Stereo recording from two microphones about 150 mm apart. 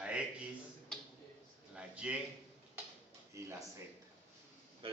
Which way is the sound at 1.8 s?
5° right (ahead or behind).